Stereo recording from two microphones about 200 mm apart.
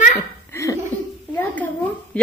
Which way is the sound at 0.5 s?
15° left (ahead or behind).